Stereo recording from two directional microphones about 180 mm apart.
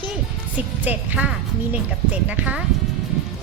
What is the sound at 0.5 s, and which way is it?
A woman's voice, 10° right (ahead or behind).